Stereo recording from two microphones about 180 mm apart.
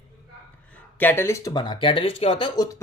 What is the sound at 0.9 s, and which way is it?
Speech, 10° left (ahead or behind).